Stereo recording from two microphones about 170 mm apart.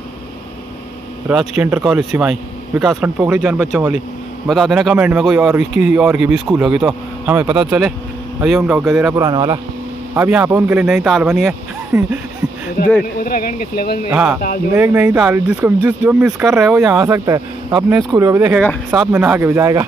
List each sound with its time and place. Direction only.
1.6 s speech: 5° right (ahead or behind)
9.1 s speech: 25° right (ahead or behind)
10.1 s speech: 15° right (ahead or behind)
12.8 s speech: 60° left (ahead or behind)
14.1 s speech: 10° right (ahead or behind)
17.0 s speech: 20° right (ahead or behind)